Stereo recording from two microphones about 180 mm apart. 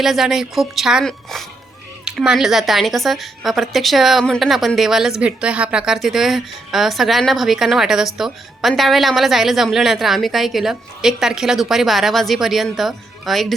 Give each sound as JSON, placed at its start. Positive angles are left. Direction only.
{"t": 0.0, "sound": "a woman's voice", "side_deg": 0}